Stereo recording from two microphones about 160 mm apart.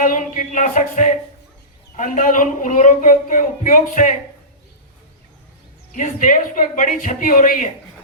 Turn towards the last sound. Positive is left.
turn(degrees=55)  # may be behind; listen again after turning